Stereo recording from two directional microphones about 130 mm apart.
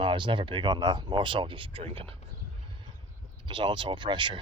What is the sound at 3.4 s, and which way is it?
Speech, 35° right (ahead or behind).